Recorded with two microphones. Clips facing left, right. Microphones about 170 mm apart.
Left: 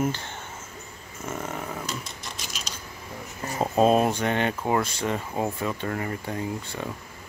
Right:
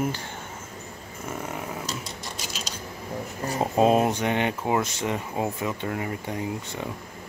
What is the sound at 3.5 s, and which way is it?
Speech, 15° right (ahead or behind).